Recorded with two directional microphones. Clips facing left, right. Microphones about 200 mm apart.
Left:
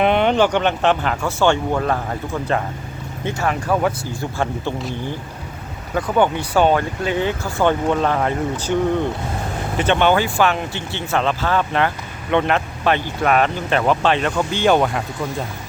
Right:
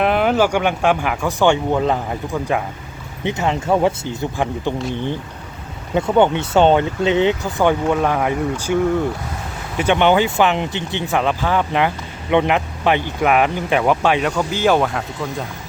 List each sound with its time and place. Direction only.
0.0 s speech: 5° right (ahead or behind); by 4.7 s 20° right (ahead or behind)
5.9 s speech: 25° right (ahead or behind); by 15.0 s centre (ahead or behind)